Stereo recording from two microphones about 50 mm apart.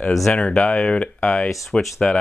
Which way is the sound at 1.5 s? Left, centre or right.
Centre.